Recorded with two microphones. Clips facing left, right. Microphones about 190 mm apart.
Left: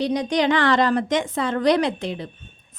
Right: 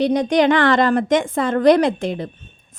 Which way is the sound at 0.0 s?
55° right (ahead or behind).